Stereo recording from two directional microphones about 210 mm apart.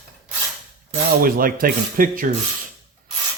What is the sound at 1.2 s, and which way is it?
Speech, 40° right (ahead or behind).